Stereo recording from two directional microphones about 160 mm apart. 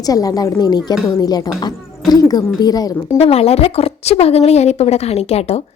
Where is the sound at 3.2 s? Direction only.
40° left (ahead or behind).